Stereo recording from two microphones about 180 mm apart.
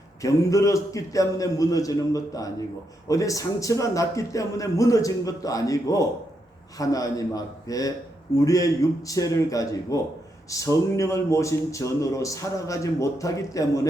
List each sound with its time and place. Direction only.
0.2 s a man's voice: 20° left (ahead or behind)